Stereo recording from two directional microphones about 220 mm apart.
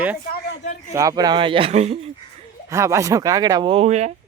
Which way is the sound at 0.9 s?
15° right (ahead or behind).